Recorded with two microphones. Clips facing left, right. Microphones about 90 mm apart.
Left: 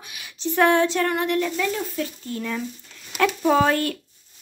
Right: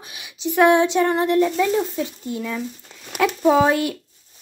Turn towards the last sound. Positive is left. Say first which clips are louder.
# right 3 dB
turn(degrees=-15)  # may be behind; listen again after turning